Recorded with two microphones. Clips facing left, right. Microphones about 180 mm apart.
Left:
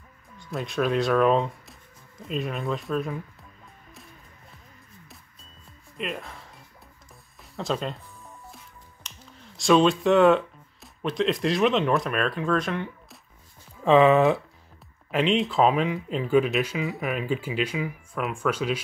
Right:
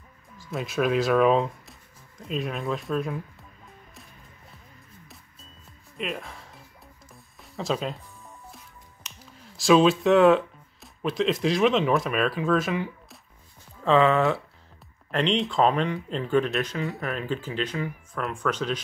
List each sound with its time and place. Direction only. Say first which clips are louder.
0.4 s speech: even; centre (ahead or behind)
5.9 s music: even; centre (ahead or behind)
7.5 s speech: even; centre (ahead or behind)
9.2 s speech: even; 5° right (ahead or behind)
13.8 s speech: left 3 dB; 15° left (ahead or behind)
15.0 s speech: left 2 dB; 5° left (ahead or behind)